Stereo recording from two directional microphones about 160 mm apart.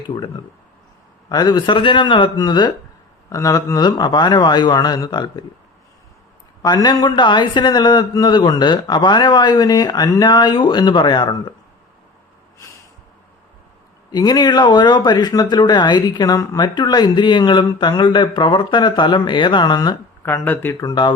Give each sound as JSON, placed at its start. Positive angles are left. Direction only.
{"t": 0.1, "sound": "speech", "side_deg": 25}
{"t": 6.6, "sound": "speech", "side_deg": 25}
{"t": 14.1, "sound": "speech", "side_deg": 25}
{"t": 20.2, "sound": "speech", "side_deg": 10}